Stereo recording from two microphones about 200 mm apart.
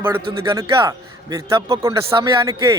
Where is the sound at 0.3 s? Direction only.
20° right (ahead or behind).